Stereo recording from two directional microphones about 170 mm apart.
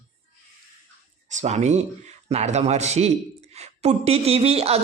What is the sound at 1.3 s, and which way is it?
Speech, 45° right (ahead or behind).